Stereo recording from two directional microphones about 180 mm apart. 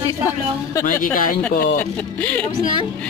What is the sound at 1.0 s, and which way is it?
Speech, 50° left (ahead or behind).